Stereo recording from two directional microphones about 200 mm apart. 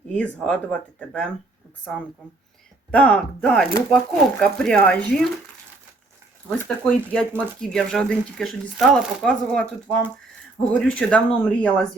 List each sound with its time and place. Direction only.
0.1 s speech: 5° left (ahead or behind)
7.1 s speech: 5° left (ahead or behind)